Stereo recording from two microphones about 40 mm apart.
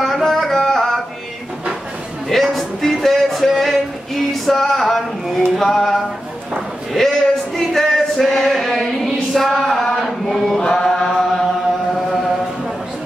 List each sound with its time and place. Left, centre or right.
0.0 s music: centre
0.6 s a sound: centre
2.5 s music: centre
5.6 s a sound: centre
10.0 s chant: centre
10.6 s chant: centre